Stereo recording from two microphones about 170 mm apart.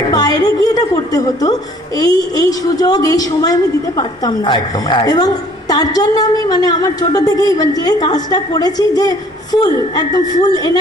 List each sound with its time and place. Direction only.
0.1 s a woman's voice: 20° left (ahead or behind)